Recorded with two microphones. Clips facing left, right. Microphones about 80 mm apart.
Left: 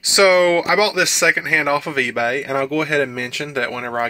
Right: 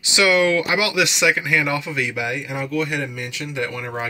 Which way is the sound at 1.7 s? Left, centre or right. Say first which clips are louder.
Left 5 dB; left.